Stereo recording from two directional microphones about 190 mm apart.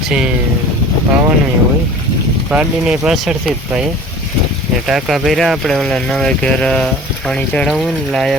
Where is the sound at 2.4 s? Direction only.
5° right (ahead or behind).